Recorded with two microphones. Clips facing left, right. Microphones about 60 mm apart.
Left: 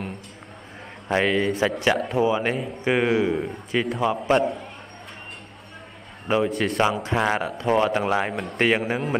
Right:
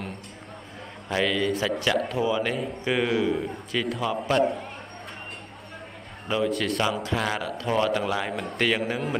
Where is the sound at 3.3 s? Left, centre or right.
Centre.